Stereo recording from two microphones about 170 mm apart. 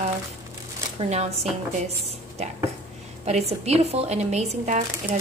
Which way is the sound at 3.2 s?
40° right (ahead or behind).